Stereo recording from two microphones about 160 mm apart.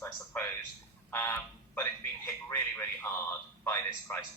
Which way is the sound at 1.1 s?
15° left (ahead or behind).